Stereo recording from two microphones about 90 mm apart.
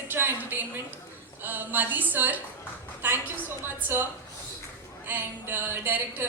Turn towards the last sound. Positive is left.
turn(degrees=-20)  # may be behind; listen again after turning